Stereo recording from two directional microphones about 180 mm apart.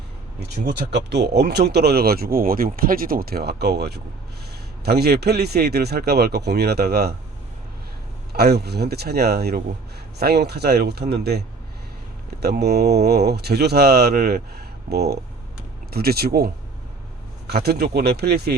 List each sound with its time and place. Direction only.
0.3 s speech: 65° right (ahead or behind)
8.3 s speech: 60° right (ahead or behind)